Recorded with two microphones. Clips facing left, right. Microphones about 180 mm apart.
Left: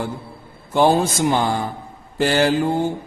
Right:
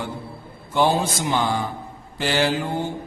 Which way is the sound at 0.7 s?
45° left (ahead or behind).